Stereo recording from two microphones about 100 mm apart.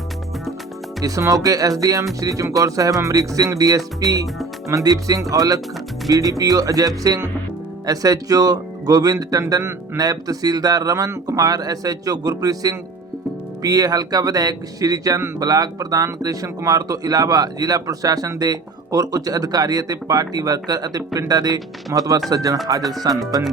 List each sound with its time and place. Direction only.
1.0 s speech: 35° right (ahead or behind)